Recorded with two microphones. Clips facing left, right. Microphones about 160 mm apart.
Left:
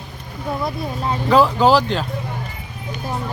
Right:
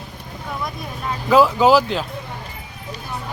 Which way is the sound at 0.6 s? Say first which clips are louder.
Left 4 dB; 30° left (ahead or behind).